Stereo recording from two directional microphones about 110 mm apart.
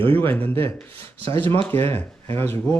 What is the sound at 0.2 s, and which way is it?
Speech, 15° left (ahead or behind).